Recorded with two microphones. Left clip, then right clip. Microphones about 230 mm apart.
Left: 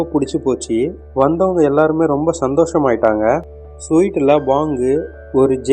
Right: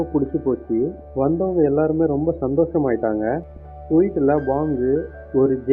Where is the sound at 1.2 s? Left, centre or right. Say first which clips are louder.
Left 6 dB; left.